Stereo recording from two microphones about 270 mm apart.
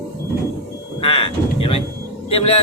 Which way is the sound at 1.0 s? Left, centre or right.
Centre.